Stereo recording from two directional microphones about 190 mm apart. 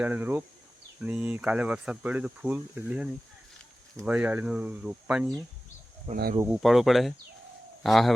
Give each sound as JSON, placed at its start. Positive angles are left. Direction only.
{"t": 0.0, "sound": "speech", "side_deg": -10}
{"t": 6.1, "sound": "speech", "side_deg": -30}
{"t": 6.6, "sound": "speech", "side_deg": 0}